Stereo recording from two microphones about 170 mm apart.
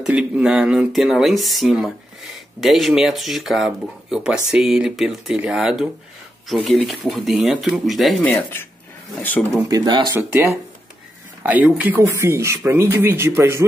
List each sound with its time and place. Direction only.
0.0 s speech: 5° right (ahead or behind)
9.7 s speech: 25° right (ahead or behind)
11.4 s speech: 10° right (ahead or behind)